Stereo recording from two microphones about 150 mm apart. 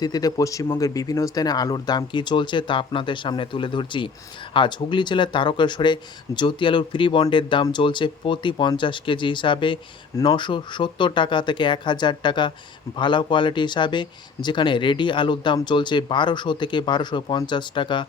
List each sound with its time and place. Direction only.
0.0 s speech: 25° left (ahead or behind)